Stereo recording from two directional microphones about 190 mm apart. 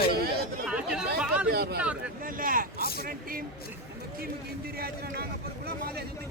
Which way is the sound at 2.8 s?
55° left (ahead or behind).